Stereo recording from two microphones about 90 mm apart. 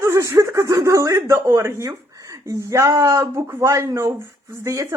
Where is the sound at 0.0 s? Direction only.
35° right (ahead or behind).